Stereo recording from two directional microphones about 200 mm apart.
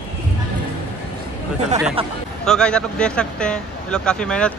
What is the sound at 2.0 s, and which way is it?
Speech, 30° right (ahead or behind).